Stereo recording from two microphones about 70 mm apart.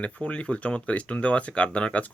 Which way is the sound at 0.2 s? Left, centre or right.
Centre.